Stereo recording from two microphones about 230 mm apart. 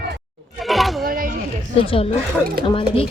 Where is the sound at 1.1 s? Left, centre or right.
Right.